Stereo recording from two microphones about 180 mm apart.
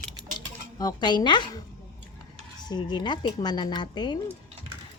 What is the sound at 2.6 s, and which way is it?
Speech, 25° left (ahead or behind).